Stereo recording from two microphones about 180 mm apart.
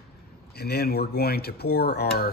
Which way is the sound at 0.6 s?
65° left (ahead or behind).